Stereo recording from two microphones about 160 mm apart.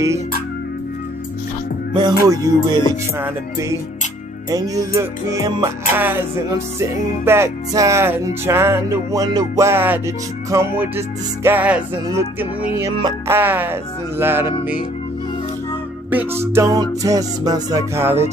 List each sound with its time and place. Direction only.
2.0 s music: 25° right (ahead or behind)
13.3 s music: 10° right (ahead or behind)
16.1 s music: 15° right (ahead or behind)